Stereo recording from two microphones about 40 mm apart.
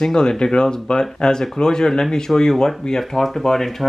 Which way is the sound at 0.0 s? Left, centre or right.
Centre.